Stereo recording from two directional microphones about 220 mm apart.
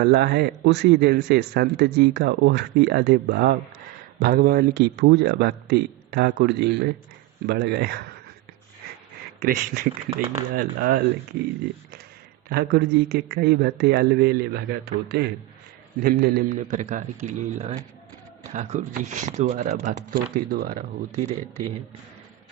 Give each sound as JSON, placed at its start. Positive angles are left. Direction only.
{"t": 0.0, "sound": "a man's voice", "side_deg": -45}
{"t": 9.4, "sound": "speech", "side_deg": -40}
{"t": 12.5, "sound": "a man's voice", "side_deg": -45}